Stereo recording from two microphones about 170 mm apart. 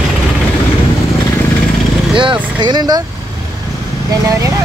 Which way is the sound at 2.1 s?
30° right (ahead or behind).